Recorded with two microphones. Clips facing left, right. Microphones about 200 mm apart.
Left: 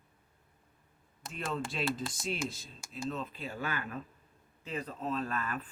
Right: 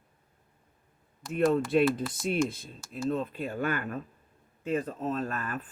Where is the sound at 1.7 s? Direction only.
55° right (ahead or behind).